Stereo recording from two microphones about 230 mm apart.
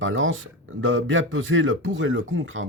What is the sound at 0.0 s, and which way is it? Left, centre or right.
Speech, right.